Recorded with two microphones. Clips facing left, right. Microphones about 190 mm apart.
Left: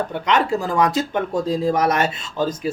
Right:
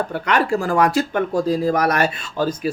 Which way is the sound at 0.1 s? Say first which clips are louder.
Even; 20° left (ahead or behind).